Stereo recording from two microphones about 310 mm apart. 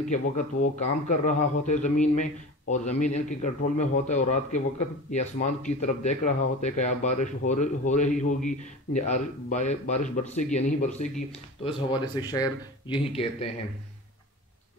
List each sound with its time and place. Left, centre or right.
0.1 s speech: left